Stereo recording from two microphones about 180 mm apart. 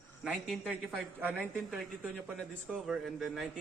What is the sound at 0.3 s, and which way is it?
A man's voice, centre (ahead or behind).